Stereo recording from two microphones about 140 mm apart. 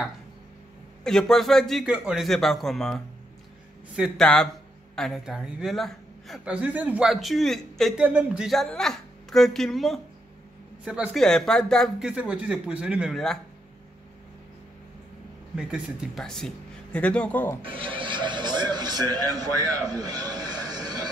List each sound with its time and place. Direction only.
1.0 s a woman's voice: 5° left (ahead or behind)
8.0 s a woman's voice: 10° right (ahead or behind)
11.1 s speech: 5° left (ahead or behind)
15.5 s speech: centre (ahead or behind)
17.6 s speech: 40° right (ahead or behind)
19.9 s a sound: 25° right (ahead or behind)